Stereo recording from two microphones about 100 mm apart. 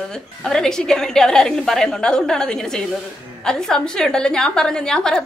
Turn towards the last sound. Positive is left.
turn(degrees=10)  # may be behind; listen again after turning